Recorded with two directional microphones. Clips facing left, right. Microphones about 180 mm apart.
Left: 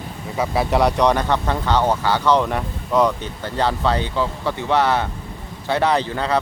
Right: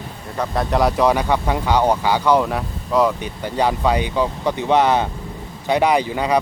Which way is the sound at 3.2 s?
15° right (ahead or behind).